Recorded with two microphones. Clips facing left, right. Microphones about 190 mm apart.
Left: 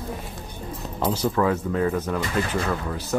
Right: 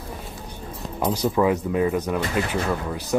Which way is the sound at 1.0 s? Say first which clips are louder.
Right 2 dB; 10° right (ahead or behind).